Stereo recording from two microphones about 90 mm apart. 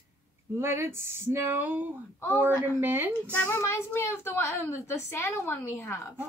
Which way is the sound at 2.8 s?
20° right (ahead or behind).